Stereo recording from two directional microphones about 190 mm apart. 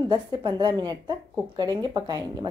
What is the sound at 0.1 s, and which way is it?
Speech, 25° right (ahead or behind).